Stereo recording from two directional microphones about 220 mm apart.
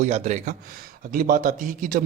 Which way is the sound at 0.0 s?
35° right (ahead or behind).